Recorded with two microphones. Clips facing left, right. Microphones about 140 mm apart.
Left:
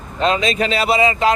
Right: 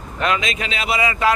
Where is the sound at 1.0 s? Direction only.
25° left (ahead or behind).